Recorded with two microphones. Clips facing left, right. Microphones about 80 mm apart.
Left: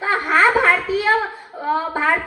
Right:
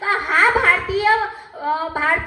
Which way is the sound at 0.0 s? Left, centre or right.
Centre.